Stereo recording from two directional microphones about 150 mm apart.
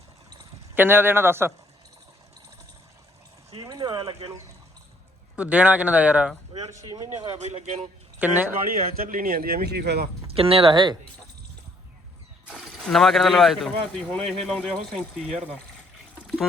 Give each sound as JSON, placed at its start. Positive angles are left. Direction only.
{"t": 0.8, "sound": "speech", "side_deg": -15}
{"t": 3.6, "sound": "a sound", "side_deg": -25}
{"t": 5.4, "sound": "speech", "side_deg": -10}
{"t": 6.5, "sound": "speech", "side_deg": -35}
{"t": 7.3, "sound": "speech", "side_deg": -50}
{"t": 8.2, "sound": "speech", "side_deg": -10}
{"t": 8.7, "sound": "speech", "side_deg": -65}
{"t": 10.3, "sound": "speech", "side_deg": -40}
{"t": 12.5, "sound": "speech", "side_deg": 0}
{"t": 16.2, "sound": "pour", "side_deg": 5}